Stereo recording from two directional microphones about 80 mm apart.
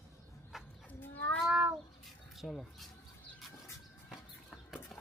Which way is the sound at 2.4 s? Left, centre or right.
Centre.